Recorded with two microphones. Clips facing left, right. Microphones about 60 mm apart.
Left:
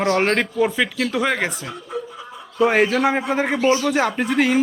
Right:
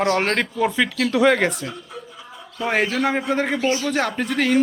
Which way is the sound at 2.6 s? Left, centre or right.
Centre.